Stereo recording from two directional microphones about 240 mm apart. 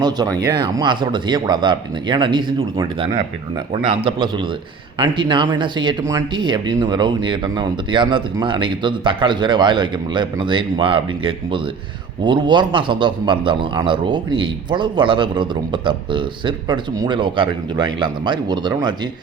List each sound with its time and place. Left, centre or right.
0.0 s a man's voice: centre